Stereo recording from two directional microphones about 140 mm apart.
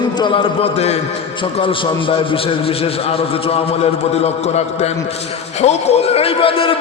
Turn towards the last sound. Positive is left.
turn(degrees=40)  # may be behind; listen again after turning